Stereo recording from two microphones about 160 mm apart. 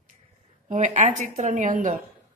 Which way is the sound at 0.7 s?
50° right (ahead or behind).